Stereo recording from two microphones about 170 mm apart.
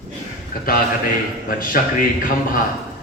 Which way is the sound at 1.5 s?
55° left (ahead or behind).